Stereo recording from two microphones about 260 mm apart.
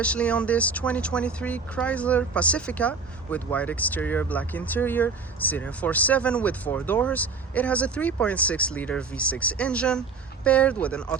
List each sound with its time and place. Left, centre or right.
0.0 s speech: centre